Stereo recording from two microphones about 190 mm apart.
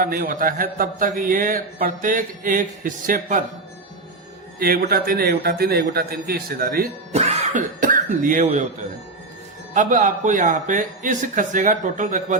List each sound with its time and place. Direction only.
0.0 s a man's voice: 50° right (ahead or behind)
4.6 s a man's voice: 50° right (ahead or behind)
7.1 s speech: 35° right (ahead or behind)
9.7 s a man's voice: 40° right (ahead or behind)